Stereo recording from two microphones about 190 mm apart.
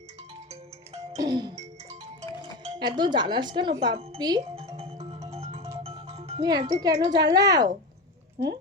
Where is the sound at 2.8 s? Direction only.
25° right (ahead or behind).